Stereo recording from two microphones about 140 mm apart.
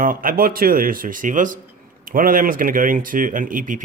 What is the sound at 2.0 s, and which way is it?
Speech, 90° right.